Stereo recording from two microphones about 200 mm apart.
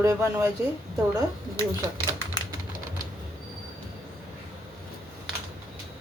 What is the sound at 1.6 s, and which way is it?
Speech, 15° left (ahead or behind).